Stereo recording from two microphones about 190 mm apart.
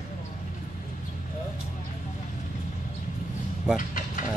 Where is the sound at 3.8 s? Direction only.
45° left (ahead or behind).